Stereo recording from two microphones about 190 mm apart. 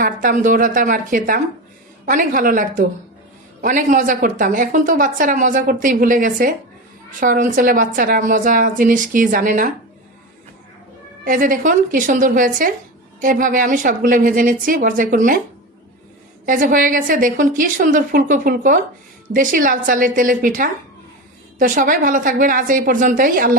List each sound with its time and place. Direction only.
0.0 s a woman's voice: 45° right (ahead or behind)
11.3 s a woman's voice: 45° right (ahead or behind)
16.5 s a woman's voice: 45° right (ahead or behind)